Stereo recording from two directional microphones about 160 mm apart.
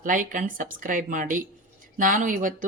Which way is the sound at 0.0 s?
55° right (ahead or behind).